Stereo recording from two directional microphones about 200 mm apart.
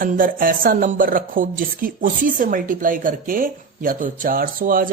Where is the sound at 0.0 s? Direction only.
45° right (ahead or behind).